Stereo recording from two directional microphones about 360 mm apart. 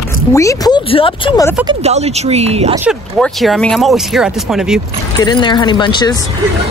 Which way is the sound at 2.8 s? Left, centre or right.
Centre.